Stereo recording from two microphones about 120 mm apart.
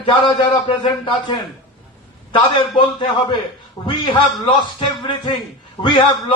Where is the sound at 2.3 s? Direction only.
45° left (ahead or behind).